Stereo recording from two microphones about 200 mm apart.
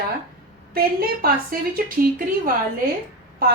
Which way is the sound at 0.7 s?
50° right (ahead or behind).